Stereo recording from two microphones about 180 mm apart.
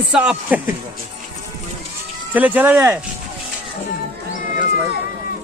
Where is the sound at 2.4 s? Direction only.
10° right (ahead or behind).